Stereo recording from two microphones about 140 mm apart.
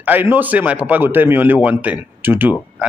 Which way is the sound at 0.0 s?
15° right (ahead or behind).